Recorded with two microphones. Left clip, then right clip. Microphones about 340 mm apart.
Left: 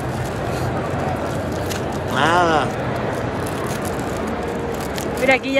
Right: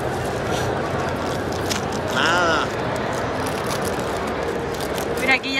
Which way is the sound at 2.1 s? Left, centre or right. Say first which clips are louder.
Left 3 dB; centre.